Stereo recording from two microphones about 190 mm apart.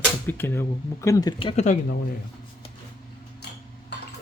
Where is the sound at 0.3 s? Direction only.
10° left (ahead or behind); by 1.8 s 35° left (ahead or behind).